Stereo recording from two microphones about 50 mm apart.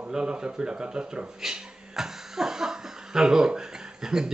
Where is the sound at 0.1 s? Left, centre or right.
Centre.